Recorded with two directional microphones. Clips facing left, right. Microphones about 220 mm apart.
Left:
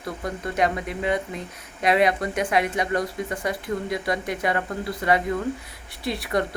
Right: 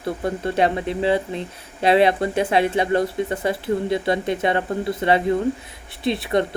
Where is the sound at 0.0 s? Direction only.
30° right (ahead or behind).